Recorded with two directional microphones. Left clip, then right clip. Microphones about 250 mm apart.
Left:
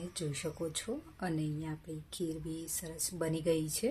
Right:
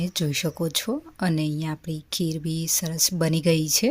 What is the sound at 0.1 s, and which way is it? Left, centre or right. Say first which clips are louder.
A woman's voice: right 11 dB; right.